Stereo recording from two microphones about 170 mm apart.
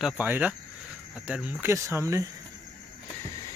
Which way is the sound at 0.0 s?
10° right (ahead or behind).